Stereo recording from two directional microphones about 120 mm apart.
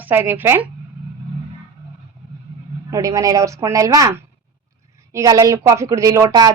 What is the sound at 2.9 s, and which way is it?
A woman's voice, 25° right (ahead or behind).